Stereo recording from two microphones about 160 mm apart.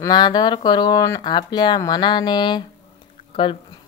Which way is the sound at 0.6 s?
25° left (ahead or behind).